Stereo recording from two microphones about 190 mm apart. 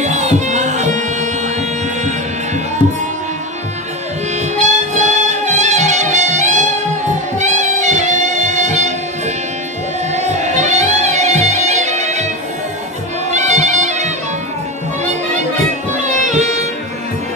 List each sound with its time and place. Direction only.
0.0 s music: 40° right (ahead or behind)
4.6 s music: 40° right (ahead or behind)
10.1 s music: 35° right (ahead or behind)
13.3 s music: 35° right (ahead or behind)
16.0 s music: 40° right (ahead or behind)